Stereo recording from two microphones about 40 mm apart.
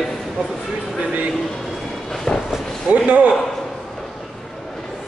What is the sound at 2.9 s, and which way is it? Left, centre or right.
Speech, right.